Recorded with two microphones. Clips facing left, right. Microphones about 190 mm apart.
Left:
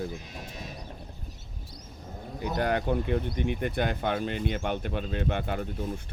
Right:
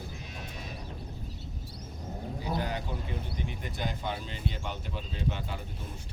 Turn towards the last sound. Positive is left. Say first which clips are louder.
# left 6 dB
turn(degrees=60)  # may be behind; listen again after turning